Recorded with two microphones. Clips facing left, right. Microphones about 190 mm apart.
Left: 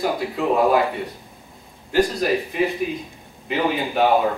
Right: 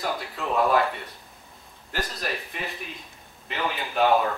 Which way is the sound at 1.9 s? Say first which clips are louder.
Left 12 dB; centre (ahead or behind).